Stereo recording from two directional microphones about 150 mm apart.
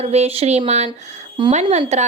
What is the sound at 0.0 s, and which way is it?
A woman's voice, 45° right (ahead or behind).